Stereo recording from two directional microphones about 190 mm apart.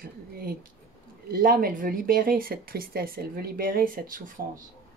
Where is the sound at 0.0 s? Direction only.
50° right (ahead or behind).